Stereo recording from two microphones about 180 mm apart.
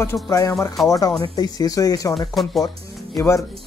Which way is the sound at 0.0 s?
15° left (ahead or behind).